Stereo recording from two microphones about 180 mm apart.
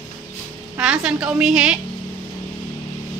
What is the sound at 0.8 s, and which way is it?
A woman's voice, 5° right (ahead or behind).